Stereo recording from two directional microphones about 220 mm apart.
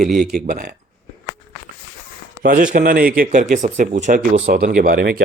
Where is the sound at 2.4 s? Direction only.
40° right (ahead or behind).